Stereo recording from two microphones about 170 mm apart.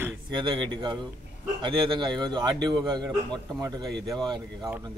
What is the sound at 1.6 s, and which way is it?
Speech, 25° right (ahead or behind).